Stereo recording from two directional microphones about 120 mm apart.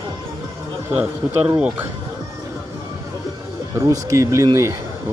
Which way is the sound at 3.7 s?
25° right (ahead or behind).